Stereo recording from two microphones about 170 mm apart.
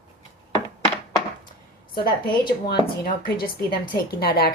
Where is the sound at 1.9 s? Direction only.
60° left (ahead or behind).